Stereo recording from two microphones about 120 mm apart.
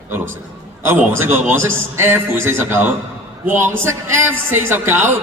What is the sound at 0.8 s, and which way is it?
A man's voice, 20° right (ahead or behind).